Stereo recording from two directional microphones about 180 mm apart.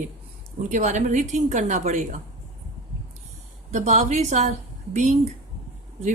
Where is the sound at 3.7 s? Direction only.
40° right (ahead or behind).